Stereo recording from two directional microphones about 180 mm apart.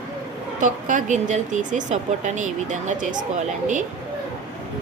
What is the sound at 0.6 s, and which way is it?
Speech, 45° right (ahead or behind).